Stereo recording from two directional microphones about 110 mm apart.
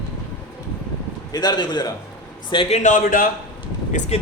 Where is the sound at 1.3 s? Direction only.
40° left (ahead or behind).